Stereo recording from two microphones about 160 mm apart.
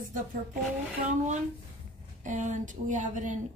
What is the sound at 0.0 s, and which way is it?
Speech, 55° right (ahead or behind).